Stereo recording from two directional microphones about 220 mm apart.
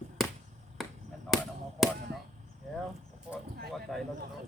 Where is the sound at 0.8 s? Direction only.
Centre (ahead or behind).